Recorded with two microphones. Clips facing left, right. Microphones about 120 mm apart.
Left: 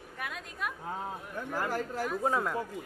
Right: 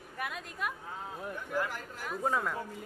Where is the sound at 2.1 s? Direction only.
5° left (ahead or behind).